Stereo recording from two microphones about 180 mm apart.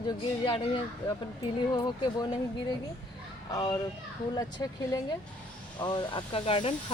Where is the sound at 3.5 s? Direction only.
20° left (ahead or behind).